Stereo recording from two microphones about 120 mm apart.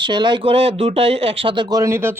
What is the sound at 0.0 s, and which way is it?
Speech, 40° right (ahead or behind).